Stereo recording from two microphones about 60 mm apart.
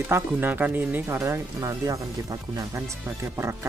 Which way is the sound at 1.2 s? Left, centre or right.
Right.